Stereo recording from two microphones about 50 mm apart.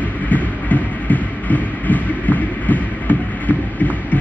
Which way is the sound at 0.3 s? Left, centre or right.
Left.